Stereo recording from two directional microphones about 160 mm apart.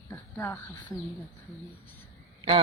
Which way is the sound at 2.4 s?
30° right (ahead or behind).